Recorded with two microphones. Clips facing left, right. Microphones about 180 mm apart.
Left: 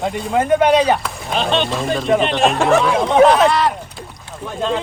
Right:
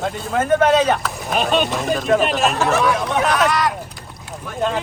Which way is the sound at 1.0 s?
Centre (ahead or behind).